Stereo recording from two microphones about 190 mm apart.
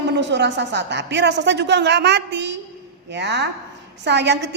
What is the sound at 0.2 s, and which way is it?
A woman's voice, 65° right (ahead or behind).